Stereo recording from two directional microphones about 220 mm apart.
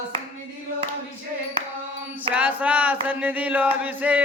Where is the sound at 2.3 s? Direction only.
5° right (ahead or behind).